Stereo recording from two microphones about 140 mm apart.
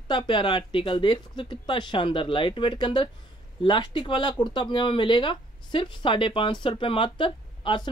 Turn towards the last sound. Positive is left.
turn(degrees=35)  # may be behind; listen again after turning